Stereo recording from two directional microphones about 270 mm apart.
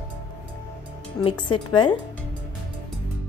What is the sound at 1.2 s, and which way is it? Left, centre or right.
Speech, centre.